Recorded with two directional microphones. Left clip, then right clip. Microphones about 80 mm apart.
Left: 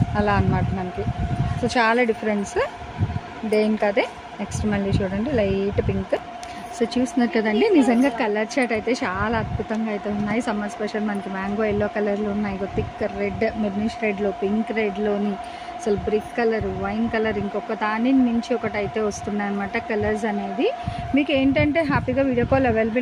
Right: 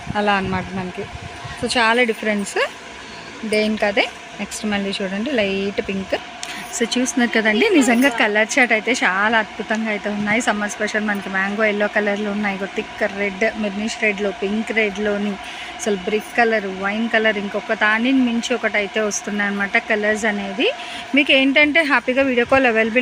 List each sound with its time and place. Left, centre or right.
0.2 s speech: centre
1.6 s speech: left
2.0 s speech: centre
3.5 s speech: centre
6.7 s speech: centre
14.0 s speech: left
14.7 s speech: centre
15.8 s speech: centre